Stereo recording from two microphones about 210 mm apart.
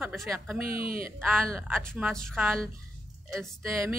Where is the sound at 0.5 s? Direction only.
45° right (ahead or behind).